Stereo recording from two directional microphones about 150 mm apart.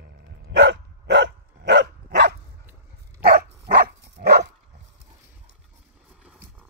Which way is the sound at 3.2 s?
85° right.